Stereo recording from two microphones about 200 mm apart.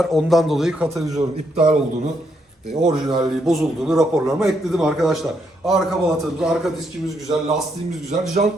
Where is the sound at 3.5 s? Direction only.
Centre (ahead or behind).